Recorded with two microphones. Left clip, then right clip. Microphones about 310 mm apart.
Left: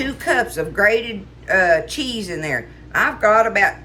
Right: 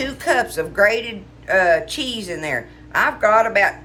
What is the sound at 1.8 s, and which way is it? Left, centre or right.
Speech, right.